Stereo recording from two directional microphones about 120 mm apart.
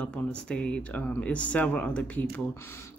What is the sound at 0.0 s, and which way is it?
Speech, 10° left (ahead or behind).